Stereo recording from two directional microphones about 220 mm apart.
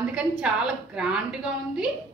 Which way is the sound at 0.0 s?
5° right (ahead or behind).